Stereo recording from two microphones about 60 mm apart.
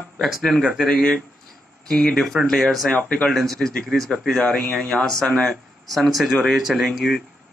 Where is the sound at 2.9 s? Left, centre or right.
Centre.